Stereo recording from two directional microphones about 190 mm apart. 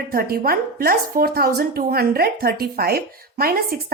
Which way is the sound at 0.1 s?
50° right (ahead or behind).